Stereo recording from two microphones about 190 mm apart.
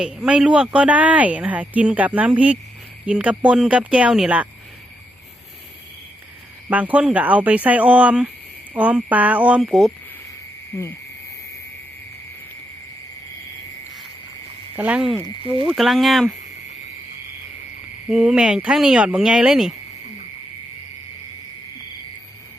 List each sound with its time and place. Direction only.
0.0 s speech: 5° right (ahead or behind)
6.7 s speech: 10° right (ahead or behind)
10.7 s cricket: 10° left (ahead or behind)
14.8 s speech: 10° right (ahead or behind)
15.4 s speech: 30° right (ahead or behind)
15.7 s speech: centre (ahead or behind)
18.1 s speech: 5° right (ahead or behind)